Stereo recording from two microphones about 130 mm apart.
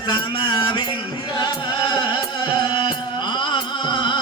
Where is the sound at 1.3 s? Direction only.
35° left (ahead or behind).